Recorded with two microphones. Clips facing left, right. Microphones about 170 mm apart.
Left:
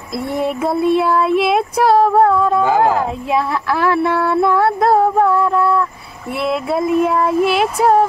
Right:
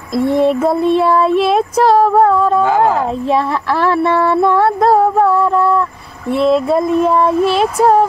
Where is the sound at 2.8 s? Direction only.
30° right (ahead or behind).